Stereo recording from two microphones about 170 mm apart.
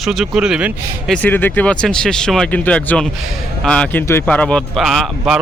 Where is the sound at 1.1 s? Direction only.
10° left (ahead or behind).